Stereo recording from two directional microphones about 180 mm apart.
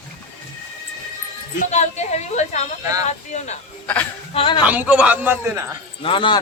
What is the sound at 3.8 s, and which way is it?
Speech, 5° left (ahead or behind).